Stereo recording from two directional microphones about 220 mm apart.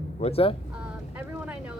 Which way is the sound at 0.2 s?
25° left (ahead or behind).